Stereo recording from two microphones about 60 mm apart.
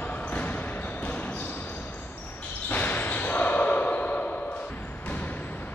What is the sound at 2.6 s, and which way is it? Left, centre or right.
Basketball bounce, left.